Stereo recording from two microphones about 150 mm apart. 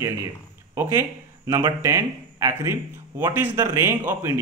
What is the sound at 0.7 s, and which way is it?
Speech, 15° right (ahead or behind).